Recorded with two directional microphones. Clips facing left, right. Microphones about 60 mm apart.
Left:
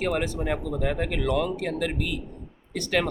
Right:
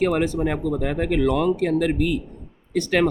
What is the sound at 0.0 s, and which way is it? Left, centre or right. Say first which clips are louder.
Speech: right 6 dB; right.